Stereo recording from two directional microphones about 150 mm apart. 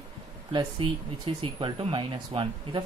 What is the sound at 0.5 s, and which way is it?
Speech, 30° right (ahead or behind).